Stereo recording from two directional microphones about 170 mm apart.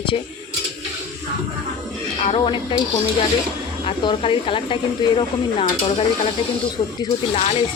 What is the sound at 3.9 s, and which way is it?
Speech, 30° left (ahead or behind).